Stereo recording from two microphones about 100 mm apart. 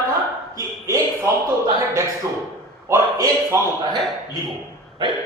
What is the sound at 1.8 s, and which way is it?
A man's voice, 30° right (ahead or behind).